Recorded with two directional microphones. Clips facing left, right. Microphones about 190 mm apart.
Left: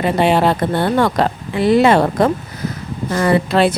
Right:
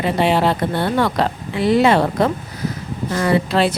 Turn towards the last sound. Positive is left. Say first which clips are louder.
# left 3 dB
turn(degrees=55)  # may be behind; listen again after turning